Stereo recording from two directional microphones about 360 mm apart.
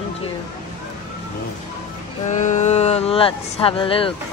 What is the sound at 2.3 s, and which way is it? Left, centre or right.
Speech, centre.